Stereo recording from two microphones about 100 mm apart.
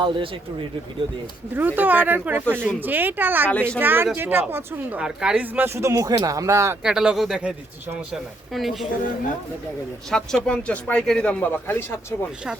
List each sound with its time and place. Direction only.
0.0 s speech: 55° right (ahead or behind)
1.5 s speech: 20° right (ahead or behind)
3.5 s speech: 10° left (ahead or behind)
3.8 s speech: 20° right (ahead or behind)
4.9 s speech: 10° right (ahead or behind); by 6.7 s 30° right (ahead or behind)
6.8 s a woman's voice: 5° right (ahead or behind)
10.1 s speech: 5° left (ahead or behind); by 11.9 s 20° left (ahead or behind)